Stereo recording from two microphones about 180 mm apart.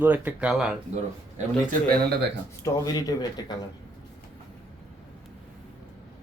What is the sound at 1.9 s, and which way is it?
Speech, 65° right (ahead or behind).